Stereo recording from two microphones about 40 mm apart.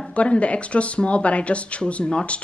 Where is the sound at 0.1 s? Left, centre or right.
Left.